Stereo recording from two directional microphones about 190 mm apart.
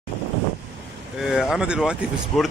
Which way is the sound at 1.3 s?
Centre (ahead or behind).